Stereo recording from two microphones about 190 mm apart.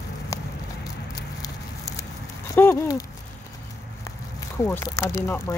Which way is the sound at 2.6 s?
15° left (ahead or behind).